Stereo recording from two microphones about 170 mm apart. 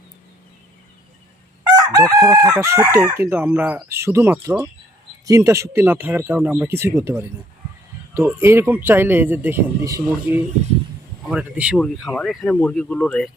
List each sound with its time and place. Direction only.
1.7 s chicken: 20° right (ahead or behind)
11.3 s chicken: 5° right (ahead or behind)
11.8 s speech: centre (ahead or behind)